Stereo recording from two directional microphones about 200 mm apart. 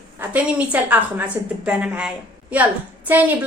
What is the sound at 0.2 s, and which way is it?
A woman's voice, 5° right (ahead or behind).